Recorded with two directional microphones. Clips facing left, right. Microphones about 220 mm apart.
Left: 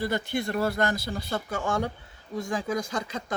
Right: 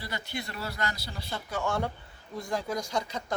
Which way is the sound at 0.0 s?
50° left (ahead or behind).